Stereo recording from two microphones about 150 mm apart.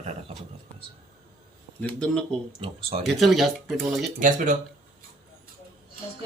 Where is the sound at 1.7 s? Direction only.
5° left (ahead or behind).